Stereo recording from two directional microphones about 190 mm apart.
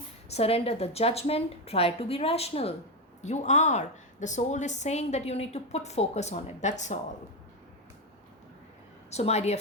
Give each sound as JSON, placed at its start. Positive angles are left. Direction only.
{"t": 0.3, "sound": "a woman's voice", "side_deg": 30}
{"t": 9.0, "sound": "a woman's voice", "side_deg": 35}